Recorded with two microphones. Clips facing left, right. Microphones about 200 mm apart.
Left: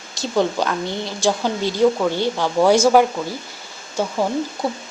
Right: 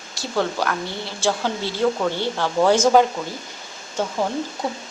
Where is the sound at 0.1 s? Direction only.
20° left (ahead or behind).